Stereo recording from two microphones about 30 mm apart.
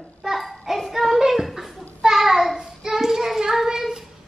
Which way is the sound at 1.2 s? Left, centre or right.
Centre.